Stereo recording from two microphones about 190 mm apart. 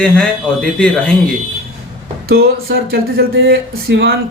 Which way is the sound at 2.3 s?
55° right (ahead or behind).